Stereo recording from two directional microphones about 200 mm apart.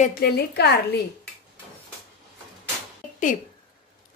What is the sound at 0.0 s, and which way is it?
Speech, 50° left (ahead or behind).